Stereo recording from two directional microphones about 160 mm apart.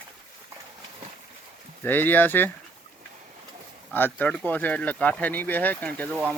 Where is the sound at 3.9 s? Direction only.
10° left (ahead or behind).